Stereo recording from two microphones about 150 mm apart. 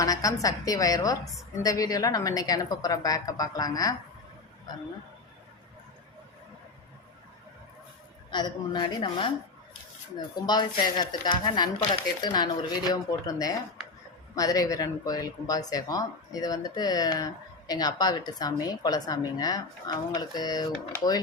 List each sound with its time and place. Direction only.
0.0 s speech: 25° left (ahead or behind)
1.2 s a woman's voice: centre (ahead or behind)
1.6 s speech: 25° left (ahead or behind)
8.3 s a woman's voice: 30° left (ahead or behind)